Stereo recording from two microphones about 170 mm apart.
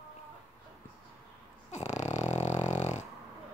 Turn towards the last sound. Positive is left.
turn(degrees=45)  # may be behind; listen again after turning